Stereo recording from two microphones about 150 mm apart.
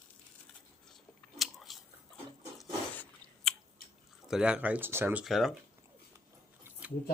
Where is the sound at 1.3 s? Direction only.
Centre (ahead or behind).